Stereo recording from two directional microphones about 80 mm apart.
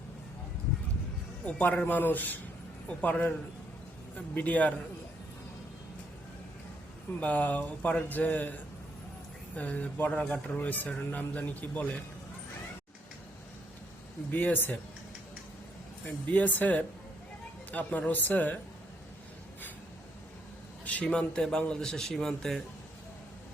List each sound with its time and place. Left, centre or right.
1.5 s speech: centre
4.4 s speech: centre
7.2 s speech: centre
9.6 s speech: centre
14.3 s speech: left
16.0 s speech: left
20.8 s a man's voice: centre